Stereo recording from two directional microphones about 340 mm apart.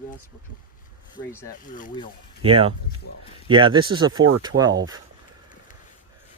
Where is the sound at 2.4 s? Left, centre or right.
Centre.